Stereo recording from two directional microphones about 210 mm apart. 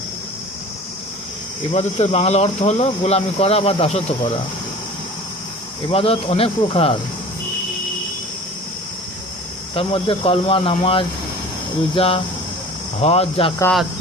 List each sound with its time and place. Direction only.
1.7 s speech: 30° left (ahead or behind)
5.9 s speech: 25° left (ahead or behind)
9.7 s speech: 25° left (ahead or behind)